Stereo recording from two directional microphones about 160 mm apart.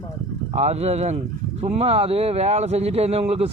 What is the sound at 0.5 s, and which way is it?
Speech, 40° right (ahead or behind).